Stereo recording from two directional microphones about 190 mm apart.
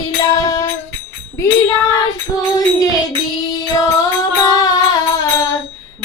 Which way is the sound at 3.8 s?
20° left (ahead or behind).